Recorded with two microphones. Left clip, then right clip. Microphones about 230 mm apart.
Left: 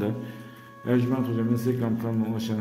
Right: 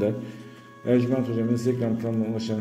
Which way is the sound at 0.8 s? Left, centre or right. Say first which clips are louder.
Right 3 dB; centre.